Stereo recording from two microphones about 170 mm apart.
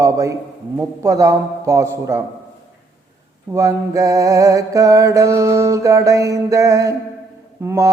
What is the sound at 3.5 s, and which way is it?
Mantra, 20° right (ahead or behind).